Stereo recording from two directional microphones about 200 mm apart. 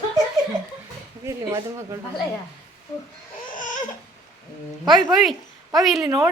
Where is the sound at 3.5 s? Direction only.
40° left (ahead or behind).